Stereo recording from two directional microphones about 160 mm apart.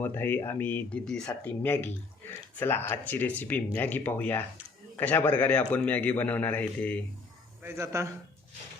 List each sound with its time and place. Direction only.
0.0 s a man's voice: 15° left (ahead or behind)
7.6 s speech: 15° right (ahead or behind)